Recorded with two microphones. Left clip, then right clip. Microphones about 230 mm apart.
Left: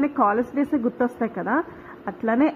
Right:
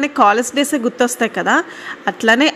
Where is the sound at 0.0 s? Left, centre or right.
Right.